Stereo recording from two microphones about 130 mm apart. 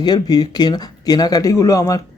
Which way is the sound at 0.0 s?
30° left (ahead or behind).